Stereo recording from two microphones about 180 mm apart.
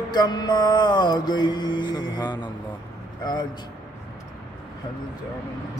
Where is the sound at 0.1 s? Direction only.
25° left (ahead or behind).